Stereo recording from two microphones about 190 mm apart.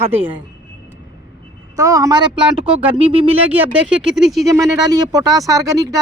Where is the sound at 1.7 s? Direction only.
15° right (ahead or behind).